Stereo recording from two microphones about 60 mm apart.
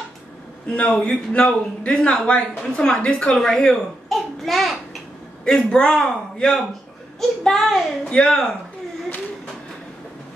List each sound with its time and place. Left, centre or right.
0.7 s a man's voice: centre
3.3 s babbling: centre
5.4 s a woman's voice: centre